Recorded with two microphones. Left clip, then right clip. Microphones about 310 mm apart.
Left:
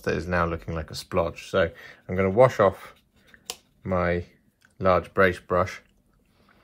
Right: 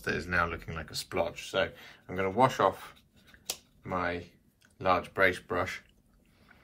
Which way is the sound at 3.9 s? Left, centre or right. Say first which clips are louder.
Left 7 dB; left.